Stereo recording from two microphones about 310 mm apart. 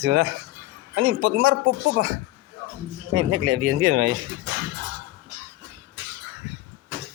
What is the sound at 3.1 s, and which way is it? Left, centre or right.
Speech, right.